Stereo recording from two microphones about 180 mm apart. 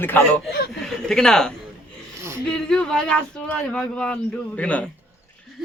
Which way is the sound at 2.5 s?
5° left (ahead or behind).